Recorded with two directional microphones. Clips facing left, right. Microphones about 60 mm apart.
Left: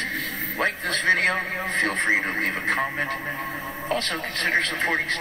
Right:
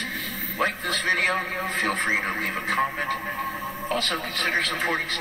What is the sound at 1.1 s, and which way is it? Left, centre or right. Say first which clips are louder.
Speech: left 2 dB; centre.